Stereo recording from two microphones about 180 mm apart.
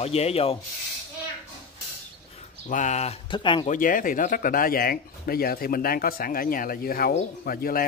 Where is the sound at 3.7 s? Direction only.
50° left (ahead or behind).